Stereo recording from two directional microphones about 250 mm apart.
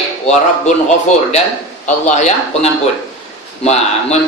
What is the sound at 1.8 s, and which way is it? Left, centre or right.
A man's voice, left.